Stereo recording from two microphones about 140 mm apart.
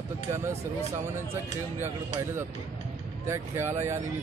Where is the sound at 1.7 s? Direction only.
15° right (ahead or behind).